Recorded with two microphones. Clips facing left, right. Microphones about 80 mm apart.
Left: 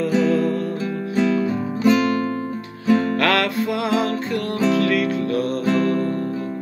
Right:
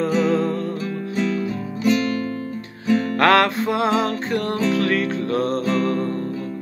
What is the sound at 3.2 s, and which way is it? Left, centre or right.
Music, right.